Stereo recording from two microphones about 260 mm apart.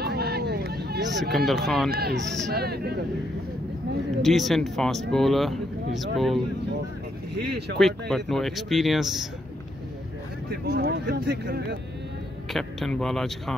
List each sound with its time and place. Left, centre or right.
0.0 s a sound: right
1.3 s speech: centre
1.9 s speech: right
2.5 s a sound: right
4.2 s speech: centre
7.3 s speech: right
7.7 s speech: centre
10.7 s speech: right
12.5 s speech: centre